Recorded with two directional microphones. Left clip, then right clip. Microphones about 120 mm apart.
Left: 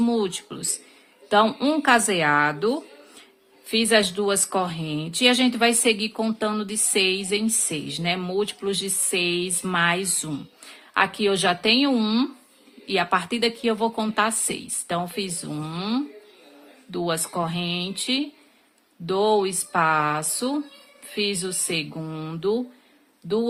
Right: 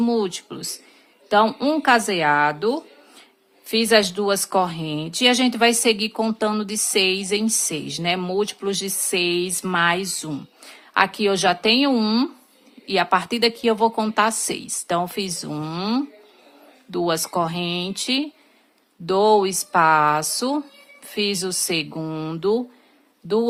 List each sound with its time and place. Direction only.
0.0 s a woman's voice: 30° right (ahead or behind)